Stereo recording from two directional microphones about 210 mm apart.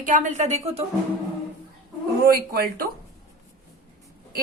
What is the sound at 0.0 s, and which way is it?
Speech, 35° right (ahead or behind).